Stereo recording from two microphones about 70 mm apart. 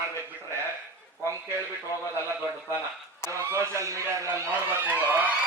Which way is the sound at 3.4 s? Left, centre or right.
Right.